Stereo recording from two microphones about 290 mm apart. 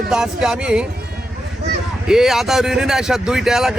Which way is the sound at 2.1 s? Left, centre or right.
Centre.